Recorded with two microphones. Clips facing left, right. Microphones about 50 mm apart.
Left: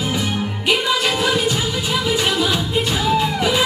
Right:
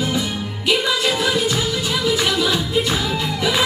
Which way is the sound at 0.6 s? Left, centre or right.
Left.